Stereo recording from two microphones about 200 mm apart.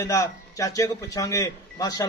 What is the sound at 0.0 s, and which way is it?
A man's voice, 15° left (ahead or behind).